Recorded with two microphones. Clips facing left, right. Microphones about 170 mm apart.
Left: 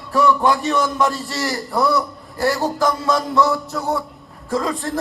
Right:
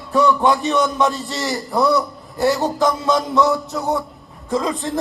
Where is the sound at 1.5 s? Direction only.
Centre (ahead or behind).